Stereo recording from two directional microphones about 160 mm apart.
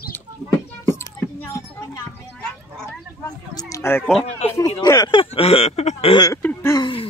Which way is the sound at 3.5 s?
20° left (ahead or behind).